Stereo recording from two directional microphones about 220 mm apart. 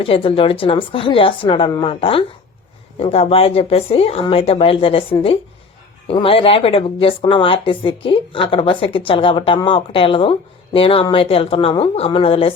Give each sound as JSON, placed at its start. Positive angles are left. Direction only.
{"t": 0.0, "sound": "speech", "side_deg": 25}